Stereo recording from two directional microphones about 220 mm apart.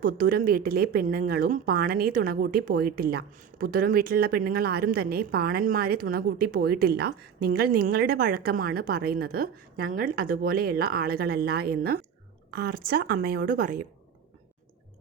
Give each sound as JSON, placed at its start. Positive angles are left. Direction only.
{"t": 0.0, "sound": "speech", "side_deg": -40}